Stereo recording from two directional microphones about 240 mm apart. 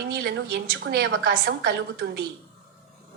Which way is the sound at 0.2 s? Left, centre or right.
Right.